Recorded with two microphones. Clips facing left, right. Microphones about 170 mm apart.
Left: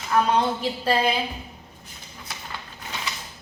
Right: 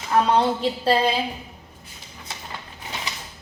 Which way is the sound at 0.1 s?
30° right (ahead or behind).